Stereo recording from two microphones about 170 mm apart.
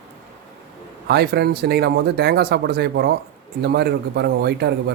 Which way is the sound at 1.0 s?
75° right (ahead or behind).